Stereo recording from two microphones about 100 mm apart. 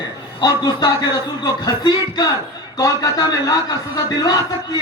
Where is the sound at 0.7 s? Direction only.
40° left (ahead or behind).